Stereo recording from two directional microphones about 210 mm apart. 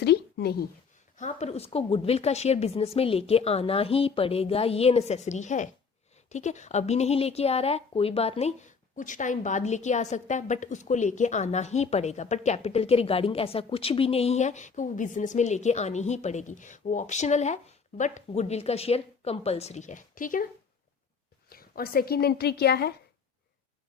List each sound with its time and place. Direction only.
0.0 s a sound: 50° left (ahead or behind)
1.1 s a woman's voice: 35° left (ahead or behind)
21.5 s a woman's voice: 45° left (ahead or behind)